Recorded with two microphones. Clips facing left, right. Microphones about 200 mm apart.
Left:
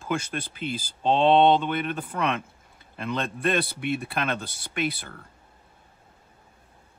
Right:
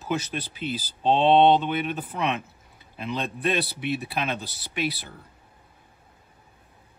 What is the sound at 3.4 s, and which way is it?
Speech, 50° left (ahead or behind).